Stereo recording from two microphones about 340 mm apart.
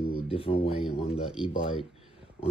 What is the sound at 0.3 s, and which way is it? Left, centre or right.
Speech, centre.